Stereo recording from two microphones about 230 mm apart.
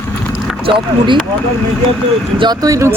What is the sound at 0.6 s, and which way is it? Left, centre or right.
Speech, right.